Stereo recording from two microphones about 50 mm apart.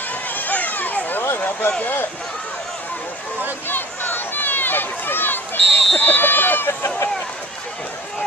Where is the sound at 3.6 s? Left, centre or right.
Left.